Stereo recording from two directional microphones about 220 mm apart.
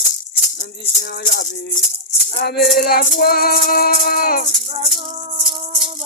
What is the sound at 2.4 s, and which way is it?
Music, 45° left (ahead or behind).